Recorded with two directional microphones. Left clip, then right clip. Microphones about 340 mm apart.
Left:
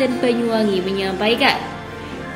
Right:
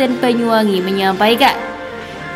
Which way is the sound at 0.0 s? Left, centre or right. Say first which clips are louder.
Right 3 dB; right.